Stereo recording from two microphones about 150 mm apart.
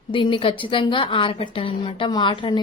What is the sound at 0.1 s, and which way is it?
A woman's voice, 35° left (ahead or behind).